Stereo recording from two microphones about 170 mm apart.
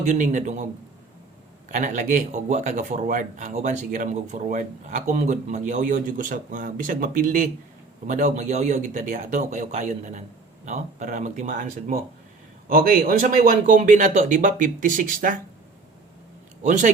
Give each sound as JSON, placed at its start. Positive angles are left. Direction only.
{"t": 0.0, "sound": "speech", "side_deg": -45}
{"t": 1.7, "sound": "speech", "side_deg": -45}
{"t": 16.6, "sound": "speech", "side_deg": -45}